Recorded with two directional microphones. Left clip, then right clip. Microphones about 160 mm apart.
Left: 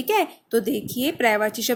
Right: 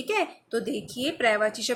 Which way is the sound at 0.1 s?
35° left (ahead or behind).